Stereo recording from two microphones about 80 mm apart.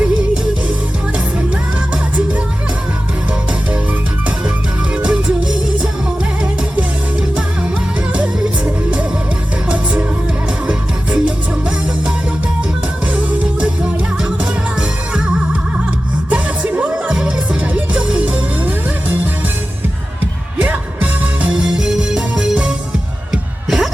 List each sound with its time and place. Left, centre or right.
5.0 s music: centre
13.6 s music: centre
16.3 s music: centre
20.6 s music: centre
21.5 s music: centre